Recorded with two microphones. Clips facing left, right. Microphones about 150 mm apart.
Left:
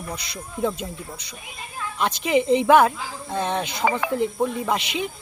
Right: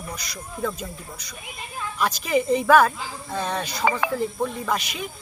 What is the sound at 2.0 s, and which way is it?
Speech, 25° left (ahead or behind).